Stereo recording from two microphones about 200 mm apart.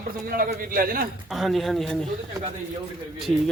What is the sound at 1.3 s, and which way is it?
Speech, centre (ahead or behind).